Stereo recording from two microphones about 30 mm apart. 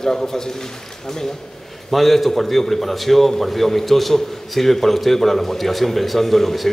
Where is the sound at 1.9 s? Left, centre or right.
Centre.